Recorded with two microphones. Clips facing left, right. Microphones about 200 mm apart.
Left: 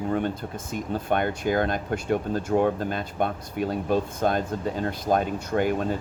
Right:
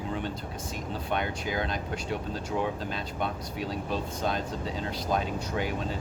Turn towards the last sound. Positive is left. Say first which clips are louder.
# left 7 dB
turn(degrees=50)  # may be behind; listen again after turning